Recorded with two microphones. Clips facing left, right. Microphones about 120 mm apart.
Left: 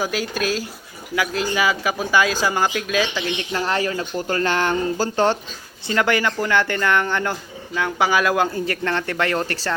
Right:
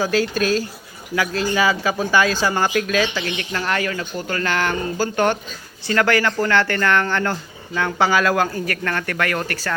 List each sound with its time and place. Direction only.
0.0 s speech: 10° left (ahead or behind); by 9.7 s 30° left (ahead or behind)